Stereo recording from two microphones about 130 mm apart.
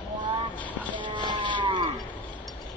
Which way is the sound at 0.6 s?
35° right (ahead or behind).